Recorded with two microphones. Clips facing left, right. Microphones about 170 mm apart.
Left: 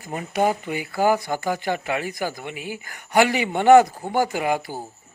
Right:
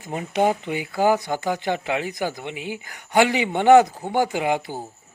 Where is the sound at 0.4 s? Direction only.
15° right (ahead or behind).